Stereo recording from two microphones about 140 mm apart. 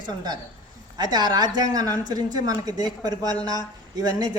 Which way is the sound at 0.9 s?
30° right (ahead or behind).